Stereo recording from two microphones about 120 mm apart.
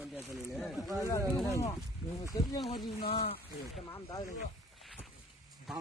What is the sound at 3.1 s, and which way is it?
Speech, 55° left (ahead or behind).